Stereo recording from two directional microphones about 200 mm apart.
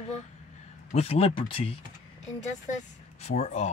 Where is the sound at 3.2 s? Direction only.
35° left (ahead or behind).